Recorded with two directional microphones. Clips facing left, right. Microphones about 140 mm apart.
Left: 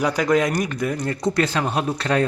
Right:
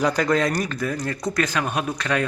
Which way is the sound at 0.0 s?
10° left (ahead or behind).